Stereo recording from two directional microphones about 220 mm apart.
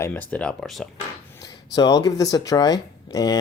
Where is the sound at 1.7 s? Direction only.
20° left (ahead or behind).